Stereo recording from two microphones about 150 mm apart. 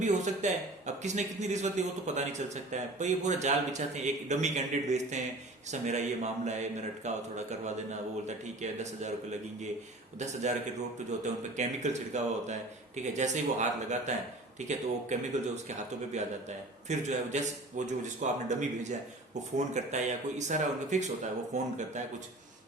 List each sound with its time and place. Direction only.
0.0 s a man's voice: 50° right (ahead or behind)
10.2 s a man's voice: 50° right (ahead or behind)